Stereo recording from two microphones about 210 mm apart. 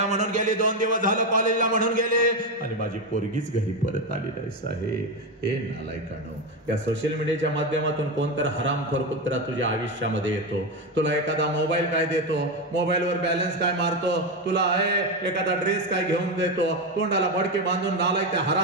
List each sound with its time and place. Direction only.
0.0 s speech: 35° right (ahead or behind)
6.7 s a man's voice: 60° right (ahead or behind)